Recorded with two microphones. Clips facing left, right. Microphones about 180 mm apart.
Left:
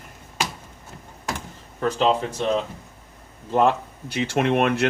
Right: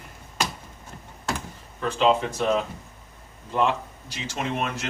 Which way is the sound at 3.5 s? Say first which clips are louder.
Left 4 dB; 50° left (ahead or behind).